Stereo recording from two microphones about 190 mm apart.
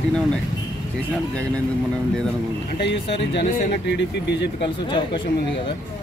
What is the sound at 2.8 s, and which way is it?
Speech, 65° left (ahead or behind).